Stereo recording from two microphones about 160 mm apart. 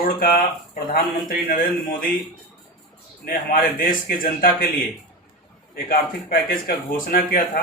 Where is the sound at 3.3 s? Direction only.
65° left (ahead or behind).